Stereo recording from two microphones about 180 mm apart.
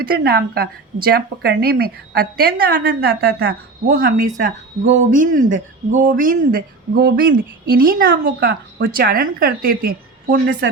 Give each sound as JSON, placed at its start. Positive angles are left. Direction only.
{"t": 0.0, "sound": "a woman's voice", "side_deg": -55}